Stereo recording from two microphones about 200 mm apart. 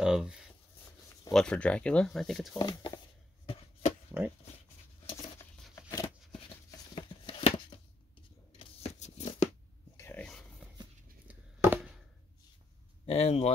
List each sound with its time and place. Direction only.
0.0 s a sound: 5° right (ahead or behind)
1.3 s speech: 5° left (ahead or behind)
2.6 s speech: 20° left (ahead or behind)
4.1 s speech: 10° right (ahead or behind)
5.4 s tearing: 15° left (ahead or behind)
7.0 s a sound: 25° left (ahead or behind)
8.5 s tearing: 30° left (ahead or behind)
9.9 s dog: 10° left (ahead or behind)
11.2 s a sound: 10° right (ahead or behind)
13.0 s speech: 30° left (ahead or behind)